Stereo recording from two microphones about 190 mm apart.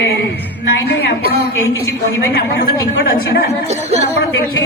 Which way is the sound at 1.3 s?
60° left (ahead or behind).